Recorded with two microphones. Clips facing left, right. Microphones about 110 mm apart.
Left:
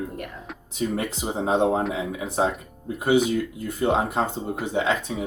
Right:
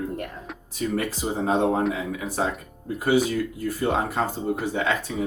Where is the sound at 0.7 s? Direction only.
20° left (ahead or behind).